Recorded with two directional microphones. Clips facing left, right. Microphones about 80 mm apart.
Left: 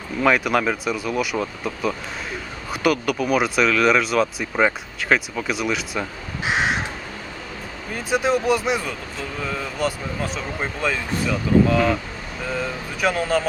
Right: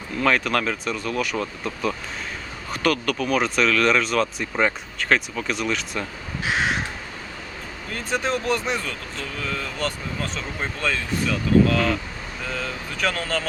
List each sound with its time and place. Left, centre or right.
0.2 s speech: centre
6.4 s crow: centre
7.9 s speech: centre